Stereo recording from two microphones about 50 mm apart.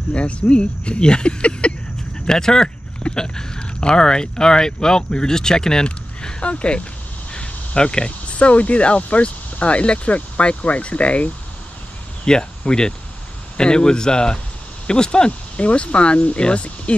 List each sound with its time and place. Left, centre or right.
0.1 s speech: left
12.3 s speech: centre